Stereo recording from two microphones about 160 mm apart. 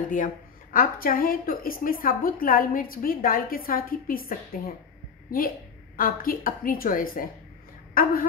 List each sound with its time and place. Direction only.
0.7 s a woman's voice: 65° left (ahead or behind)